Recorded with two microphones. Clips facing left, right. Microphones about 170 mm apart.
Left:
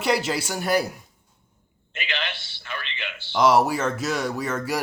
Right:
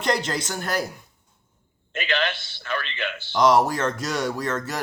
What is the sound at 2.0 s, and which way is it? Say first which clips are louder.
A man's voice: right 6 dB; 45° right (ahead or behind).